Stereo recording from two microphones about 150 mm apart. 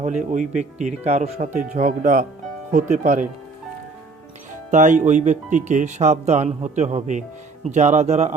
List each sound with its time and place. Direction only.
0.3 s speech: 55° right (ahead or behind)
4.7 s speech: 55° right (ahead or behind)